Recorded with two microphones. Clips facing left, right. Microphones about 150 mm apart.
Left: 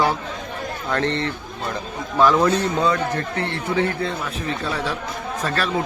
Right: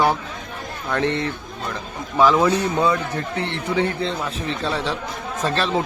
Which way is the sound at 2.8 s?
10° right (ahead or behind).